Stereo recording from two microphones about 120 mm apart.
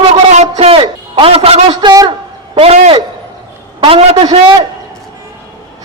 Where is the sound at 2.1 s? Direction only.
50° right (ahead or behind).